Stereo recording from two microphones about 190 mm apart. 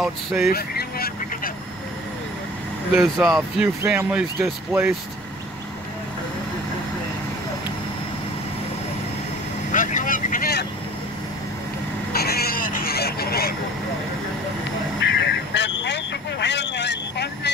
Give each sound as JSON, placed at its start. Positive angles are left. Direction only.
{"t": 0.5, "sound": "vehicle", "side_deg": 50}
{"t": 2.9, "sound": "speech", "side_deg": -10}
{"t": 9.7, "sound": "vehicle", "side_deg": 40}
{"t": 12.1, "sound": "vehicle", "side_deg": 55}
{"t": 15.0, "sound": "vehicle", "side_deg": 70}